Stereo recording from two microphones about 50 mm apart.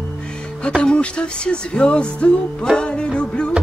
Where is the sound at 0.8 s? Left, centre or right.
Centre.